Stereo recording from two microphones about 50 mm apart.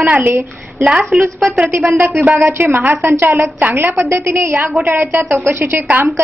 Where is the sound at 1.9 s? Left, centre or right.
Right.